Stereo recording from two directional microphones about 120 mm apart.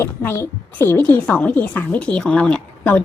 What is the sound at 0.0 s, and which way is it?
A woman's voice, 20° left (ahead or behind).